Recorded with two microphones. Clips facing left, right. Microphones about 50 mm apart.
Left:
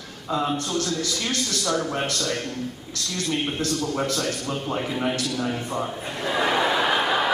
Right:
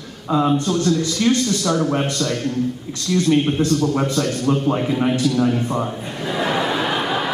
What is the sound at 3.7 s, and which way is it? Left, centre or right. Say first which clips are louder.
A man's voice: right 7 dB; centre.